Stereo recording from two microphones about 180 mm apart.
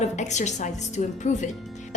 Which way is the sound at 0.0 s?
40° left (ahead or behind).